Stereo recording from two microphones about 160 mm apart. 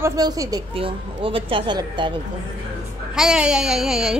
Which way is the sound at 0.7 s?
35° right (ahead or behind).